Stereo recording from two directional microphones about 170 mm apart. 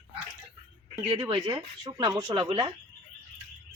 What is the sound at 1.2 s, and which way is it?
Speech, 25° right (ahead or behind).